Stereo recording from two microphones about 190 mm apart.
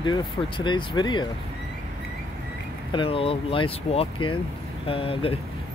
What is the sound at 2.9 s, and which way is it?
Speech, 30° left (ahead or behind).